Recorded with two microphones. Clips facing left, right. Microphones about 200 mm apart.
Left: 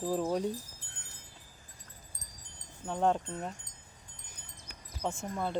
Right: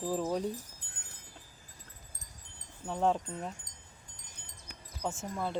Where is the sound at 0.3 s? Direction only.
Centre (ahead or behind).